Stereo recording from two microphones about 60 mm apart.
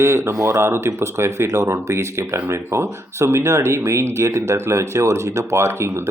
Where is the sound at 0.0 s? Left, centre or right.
Right.